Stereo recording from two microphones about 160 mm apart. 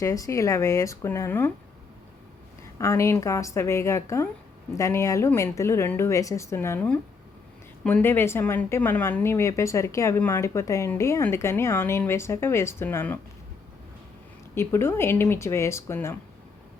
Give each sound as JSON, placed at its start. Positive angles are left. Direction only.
{"t": 0.0, "sound": "speech", "side_deg": 20}
{"t": 2.7, "sound": "speech", "side_deg": 20}
{"t": 14.5, "sound": "speech", "side_deg": 15}